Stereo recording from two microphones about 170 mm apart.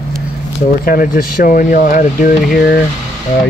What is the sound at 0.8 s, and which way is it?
Speech, 55° left (ahead or behind).